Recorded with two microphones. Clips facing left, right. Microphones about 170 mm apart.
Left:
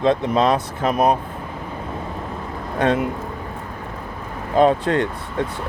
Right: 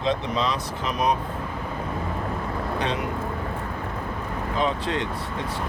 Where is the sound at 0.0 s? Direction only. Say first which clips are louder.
Left 7 dB; 55° left (ahead or behind).